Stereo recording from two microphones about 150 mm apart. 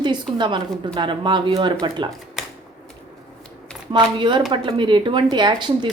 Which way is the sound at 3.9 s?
30° right (ahead or behind).